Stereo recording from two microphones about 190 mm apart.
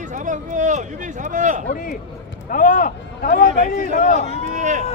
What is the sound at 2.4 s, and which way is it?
Speech, 45° left (ahead or behind).